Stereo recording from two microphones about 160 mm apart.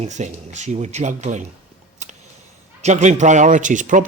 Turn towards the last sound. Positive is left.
turn(degrees=-50)  # may be behind; listen again after turning